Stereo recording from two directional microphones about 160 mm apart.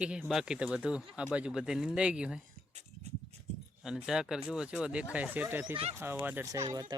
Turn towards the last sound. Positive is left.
turn(degrees=-25)  # may be behind; listen again after turning